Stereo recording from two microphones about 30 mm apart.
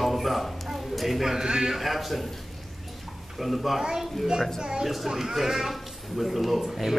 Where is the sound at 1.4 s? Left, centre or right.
Right.